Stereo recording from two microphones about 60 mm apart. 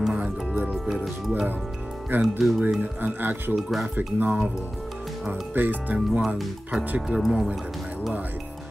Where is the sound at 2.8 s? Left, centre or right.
Right.